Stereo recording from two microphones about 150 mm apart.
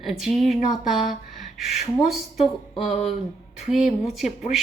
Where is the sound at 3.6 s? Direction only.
Centre (ahead or behind).